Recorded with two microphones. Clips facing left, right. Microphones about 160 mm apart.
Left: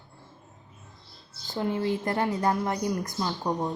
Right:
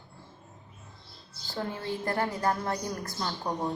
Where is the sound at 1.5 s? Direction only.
20° left (ahead or behind).